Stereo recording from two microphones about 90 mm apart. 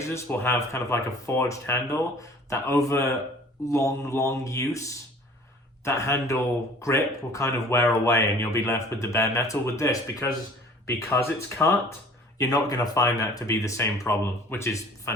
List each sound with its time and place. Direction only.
0.0 s speech: 30° left (ahead or behind)
12.4 s speech: 45° left (ahead or behind)